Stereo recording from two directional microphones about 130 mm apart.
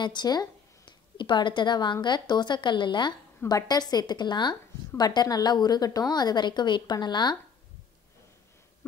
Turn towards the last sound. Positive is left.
turn(degrees=35)  # may be behind; listen again after turning